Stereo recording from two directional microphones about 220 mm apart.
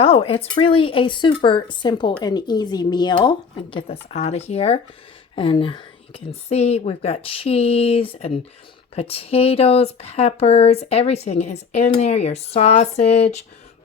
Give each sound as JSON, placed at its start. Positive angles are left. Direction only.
{"t": 0.0, "sound": "speech", "side_deg": 25}